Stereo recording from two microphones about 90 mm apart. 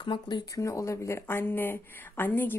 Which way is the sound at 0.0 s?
60° left (ahead or behind).